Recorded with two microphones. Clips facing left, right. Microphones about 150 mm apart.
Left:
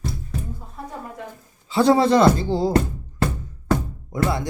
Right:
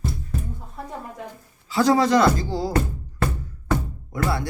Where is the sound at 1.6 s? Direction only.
25° left (ahead or behind).